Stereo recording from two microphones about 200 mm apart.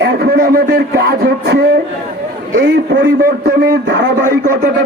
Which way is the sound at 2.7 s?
55° right (ahead or behind).